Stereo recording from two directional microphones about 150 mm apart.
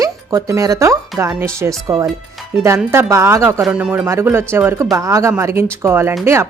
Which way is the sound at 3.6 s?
5° right (ahead or behind).